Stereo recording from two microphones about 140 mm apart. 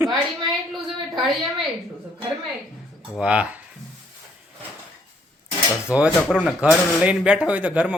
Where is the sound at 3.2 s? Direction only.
10° right (ahead or behind).